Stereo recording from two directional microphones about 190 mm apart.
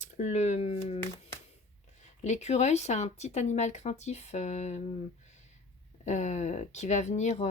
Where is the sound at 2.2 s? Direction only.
35° left (ahead or behind).